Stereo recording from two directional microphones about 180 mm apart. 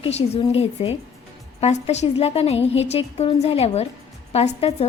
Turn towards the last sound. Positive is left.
turn(degrees=35)  # may be behind; listen again after turning